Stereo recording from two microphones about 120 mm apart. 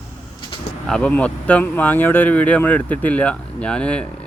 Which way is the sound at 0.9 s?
10° left (ahead or behind).